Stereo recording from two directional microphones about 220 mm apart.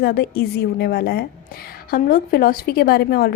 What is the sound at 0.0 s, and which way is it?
A woman's voice, 45° left (ahead or behind).